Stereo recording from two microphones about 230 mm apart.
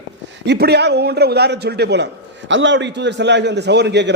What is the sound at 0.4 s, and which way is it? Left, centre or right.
A man's voice, right.